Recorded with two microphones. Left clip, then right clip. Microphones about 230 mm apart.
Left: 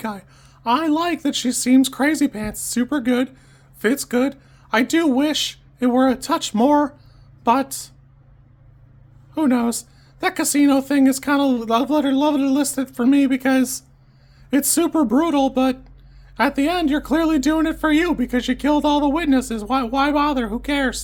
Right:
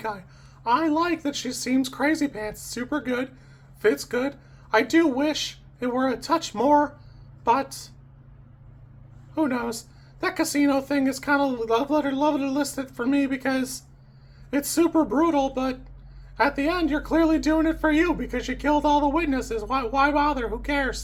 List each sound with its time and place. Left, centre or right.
0.6 s speech: left
9.3 s speech: left